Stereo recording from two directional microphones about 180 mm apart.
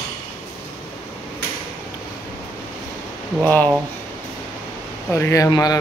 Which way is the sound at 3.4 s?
10° left (ahead or behind).